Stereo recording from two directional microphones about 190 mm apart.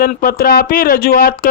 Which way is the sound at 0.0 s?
50° left (ahead or behind).